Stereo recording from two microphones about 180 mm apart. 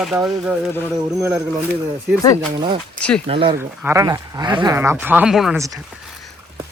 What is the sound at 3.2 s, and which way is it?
Speech, 30° right (ahead or behind).